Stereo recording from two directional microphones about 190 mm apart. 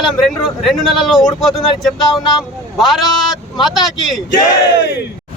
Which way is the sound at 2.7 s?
Centre (ahead or behind).